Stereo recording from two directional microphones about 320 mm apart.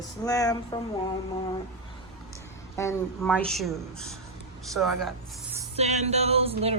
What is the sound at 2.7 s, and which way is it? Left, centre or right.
A woman's voice, centre.